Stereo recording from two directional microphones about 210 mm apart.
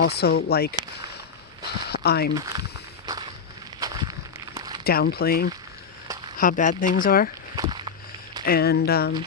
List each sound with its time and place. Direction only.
0.0 s speech: 50° left (ahead or behind)
1.9 s speech: 50° left (ahead or behind)
2.3 s speech: 15° right (ahead or behind)
3.8 s walk: 20° right (ahead or behind)
4.5 s a sound: 20° right (ahead or behind)
4.8 s speech: 45° left (ahead or behind)
7.5 s a sound: 20° right (ahead or behind)
8.4 s speech: 50° left (ahead or behind)